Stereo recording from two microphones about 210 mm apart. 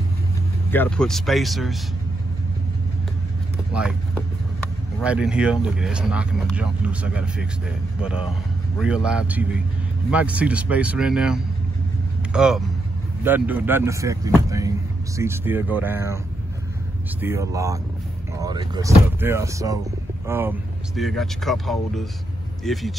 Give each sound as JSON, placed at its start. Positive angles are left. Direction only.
{"t": 0.7, "sound": "speech", "side_deg": 5}
{"t": 5.0, "sound": "speech", "side_deg": -5}
{"t": 17.2, "sound": "speech", "side_deg": -15}
{"t": 20.9, "sound": "speech", "side_deg": 0}